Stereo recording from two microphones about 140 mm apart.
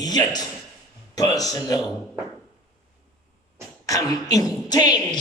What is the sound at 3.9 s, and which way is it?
A woman's voice, 25° left (ahead or behind).